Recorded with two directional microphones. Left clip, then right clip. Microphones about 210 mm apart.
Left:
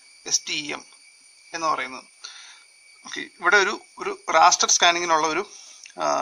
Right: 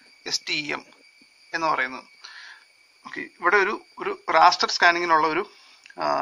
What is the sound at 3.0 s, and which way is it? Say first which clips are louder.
Speech: left 1 dB; 45° left (ahead or behind).